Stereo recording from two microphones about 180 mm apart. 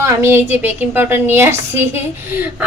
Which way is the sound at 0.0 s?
15° right (ahead or behind).